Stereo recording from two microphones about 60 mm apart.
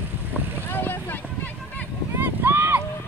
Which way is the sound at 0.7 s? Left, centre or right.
Left.